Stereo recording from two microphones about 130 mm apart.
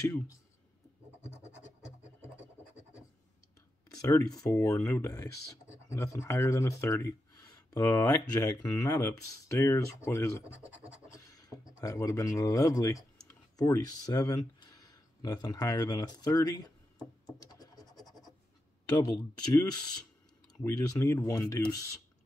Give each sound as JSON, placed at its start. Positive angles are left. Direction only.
{"t": 3.9, "sound": "a sound", "side_deg": 30}
{"t": 4.3, "sound": "speech", "side_deg": 25}
{"t": 10.4, "sound": "speech", "side_deg": -10}
{"t": 11.1, "sound": "a sound", "side_deg": 25}
{"t": 11.8, "sound": "speech", "side_deg": 25}
{"t": 17.4, "sound": "scratch", "side_deg": 30}
{"t": 18.9, "sound": "speech", "side_deg": 30}
{"t": 20.6, "sound": "speech", "side_deg": 20}